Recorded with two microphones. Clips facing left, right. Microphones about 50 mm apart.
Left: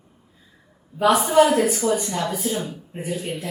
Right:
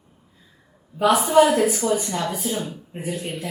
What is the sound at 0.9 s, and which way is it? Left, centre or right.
Speech, centre.